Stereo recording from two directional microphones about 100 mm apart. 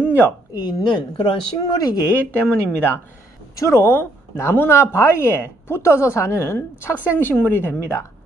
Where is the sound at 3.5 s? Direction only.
30° left (ahead or behind).